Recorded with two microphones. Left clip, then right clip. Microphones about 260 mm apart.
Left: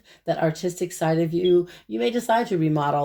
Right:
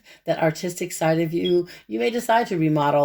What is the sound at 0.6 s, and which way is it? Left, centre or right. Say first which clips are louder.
Speech: right 2 dB; right.